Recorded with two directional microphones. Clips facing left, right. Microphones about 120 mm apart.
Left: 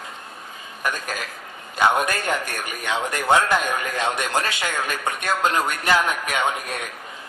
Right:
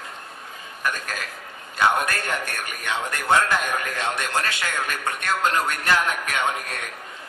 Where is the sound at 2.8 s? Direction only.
15° left (ahead or behind).